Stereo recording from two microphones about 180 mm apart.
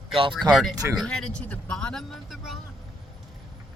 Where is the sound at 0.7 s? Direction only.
20° right (ahead or behind).